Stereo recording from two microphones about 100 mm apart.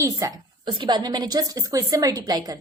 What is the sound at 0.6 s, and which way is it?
A woman's voice, 50° right (ahead or behind).